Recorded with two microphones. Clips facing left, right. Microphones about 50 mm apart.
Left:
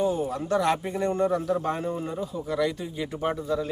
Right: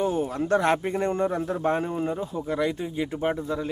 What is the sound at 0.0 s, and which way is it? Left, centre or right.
Speech, right.